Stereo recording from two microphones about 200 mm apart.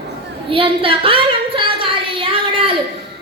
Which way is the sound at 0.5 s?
25° right (ahead or behind).